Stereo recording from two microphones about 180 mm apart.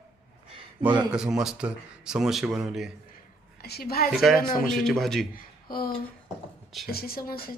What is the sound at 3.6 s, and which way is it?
Speech, 60° left (ahead or behind).